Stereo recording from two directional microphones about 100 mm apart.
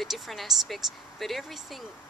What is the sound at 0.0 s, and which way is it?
Speech, centre (ahead or behind).